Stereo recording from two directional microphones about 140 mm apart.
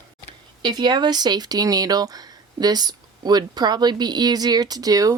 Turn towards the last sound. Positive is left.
turn(degrees=-25)  # may be behind; listen again after turning